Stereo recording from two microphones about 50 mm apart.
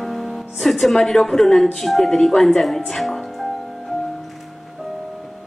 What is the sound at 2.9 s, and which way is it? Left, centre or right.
Music, centre.